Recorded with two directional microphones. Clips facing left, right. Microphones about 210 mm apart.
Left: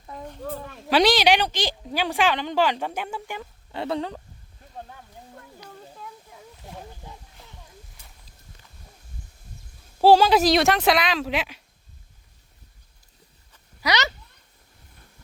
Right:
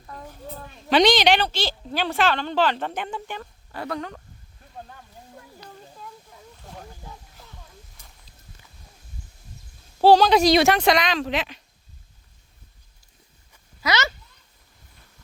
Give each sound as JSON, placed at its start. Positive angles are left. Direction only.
{"t": 0.9, "sound": "a woman's voice", "side_deg": 5}
{"t": 3.8, "sound": "speech", "side_deg": 30}
{"t": 5.6, "sound": "a sound", "side_deg": -5}
{"t": 6.3, "sound": "snake", "side_deg": 10}
{"t": 10.0, "sound": "speech", "side_deg": 5}
{"t": 13.8, "sound": "a woman's voice", "side_deg": 15}